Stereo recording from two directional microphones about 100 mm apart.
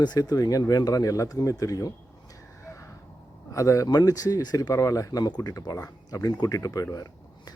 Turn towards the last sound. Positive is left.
turn(degrees=35)  # may be behind; listen again after turning